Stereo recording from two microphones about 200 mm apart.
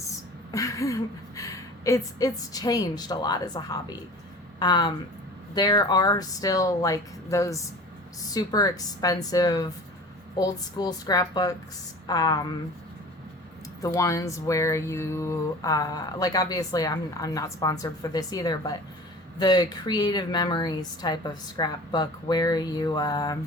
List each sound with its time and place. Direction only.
0.1 s a woman's voice: 15° left (ahead or behind)
13.8 s a woman's voice: 15° left (ahead or behind)